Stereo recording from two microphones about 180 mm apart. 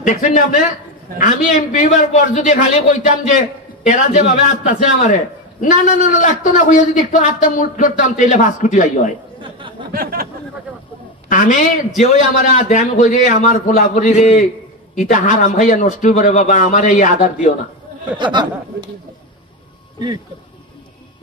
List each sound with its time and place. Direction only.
0.0 s a man's voice: 45° left (ahead or behind)
9.4 s chatter: 30° right (ahead or behind)
11.2 s a man's voice: 45° left (ahead or behind)
18.1 s speech: 25° right (ahead or behind)